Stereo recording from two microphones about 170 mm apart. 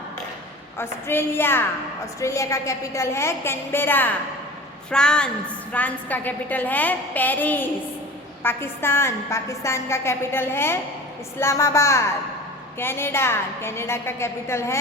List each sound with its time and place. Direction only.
0.8 s a woman's voice: 15° left (ahead or behind)